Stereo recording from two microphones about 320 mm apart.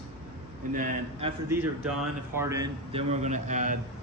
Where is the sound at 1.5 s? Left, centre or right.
Centre; by 3.8 s right.